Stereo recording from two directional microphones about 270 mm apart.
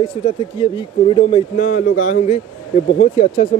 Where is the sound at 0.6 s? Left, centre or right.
Left.